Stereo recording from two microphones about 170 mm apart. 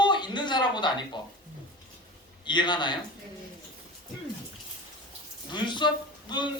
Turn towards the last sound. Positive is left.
turn(degrees=25)  # may be behind; listen again after turning